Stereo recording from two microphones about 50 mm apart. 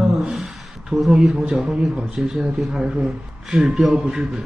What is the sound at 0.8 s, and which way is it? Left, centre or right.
Speech, centre.